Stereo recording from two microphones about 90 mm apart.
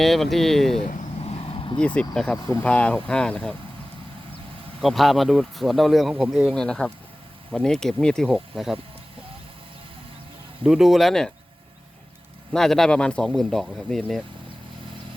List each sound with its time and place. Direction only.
0.0 s speech: centre (ahead or behind)
1.4 s vehicle: 80° left
2.0 s speech: 10° left (ahead or behind)
4.8 s speech: centre (ahead or behind)
6.5 s speech: 10° left (ahead or behind)
10.6 s speech: 5° right (ahead or behind)
12.5 s speech: 5° left (ahead or behind)